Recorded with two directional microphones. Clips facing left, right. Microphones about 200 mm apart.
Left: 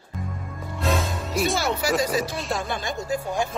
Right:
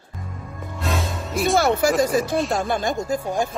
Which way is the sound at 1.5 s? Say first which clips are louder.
Right 6 dB; 50° right (ahead or behind).